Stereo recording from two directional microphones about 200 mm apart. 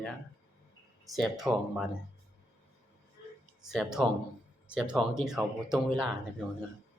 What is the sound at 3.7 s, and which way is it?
Speech, centre (ahead or behind).